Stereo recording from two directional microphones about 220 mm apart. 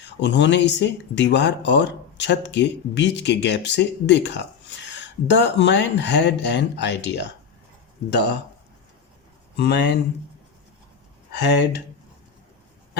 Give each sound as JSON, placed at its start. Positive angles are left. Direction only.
{"t": 0.0, "sound": "speech", "side_deg": 55}
{"t": 9.6, "sound": "speech", "side_deg": 50}
{"t": 11.3, "sound": "speech", "side_deg": 50}